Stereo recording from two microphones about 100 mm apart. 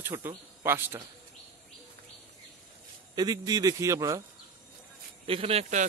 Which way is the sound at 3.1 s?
40° right (ahead or behind).